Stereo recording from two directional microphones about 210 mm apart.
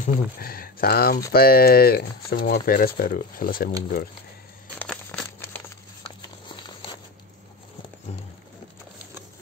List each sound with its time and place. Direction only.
0.0 s speech: 45° left (ahead or behind)
4.7 s crumpling: 5° left (ahead or behind)
6.0 s a sound: 20° left (ahead or behind)